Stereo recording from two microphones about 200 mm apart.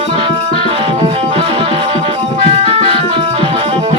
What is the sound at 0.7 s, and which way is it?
Music, 30° right (ahead or behind).